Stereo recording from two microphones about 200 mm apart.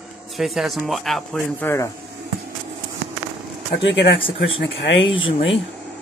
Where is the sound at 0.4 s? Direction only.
Centre (ahead or behind).